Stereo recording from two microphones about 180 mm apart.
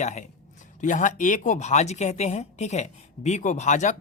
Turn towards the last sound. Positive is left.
turn(degrees=40)  # may be behind; listen again after turning